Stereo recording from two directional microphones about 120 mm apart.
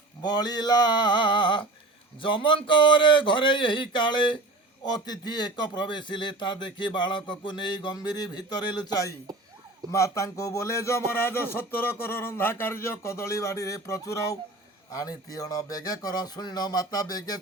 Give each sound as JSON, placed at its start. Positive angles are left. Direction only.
{"t": 0.2, "sound": "speech", "side_deg": 35}